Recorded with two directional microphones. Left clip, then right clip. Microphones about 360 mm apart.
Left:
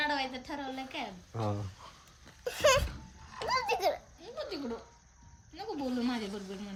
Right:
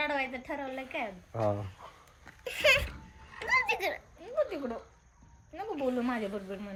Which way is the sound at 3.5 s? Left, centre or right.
Centre.